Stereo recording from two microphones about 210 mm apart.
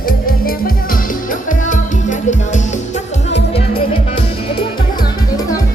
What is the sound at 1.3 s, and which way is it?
Music, 40° left (ahead or behind).